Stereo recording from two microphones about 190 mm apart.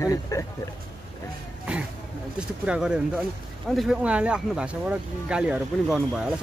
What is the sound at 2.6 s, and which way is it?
Speech, 5° right (ahead or behind).